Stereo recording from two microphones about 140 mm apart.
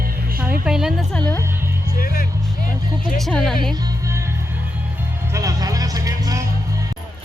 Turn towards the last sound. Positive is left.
turn(degrees=-25)  # may be behind; listen again after turning